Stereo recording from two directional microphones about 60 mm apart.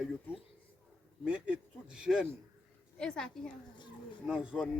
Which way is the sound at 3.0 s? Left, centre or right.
Centre.